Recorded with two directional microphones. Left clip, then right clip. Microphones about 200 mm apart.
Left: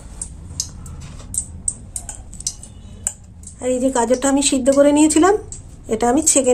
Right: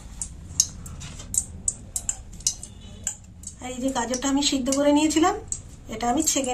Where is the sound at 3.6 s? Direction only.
65° left (ahead or behind).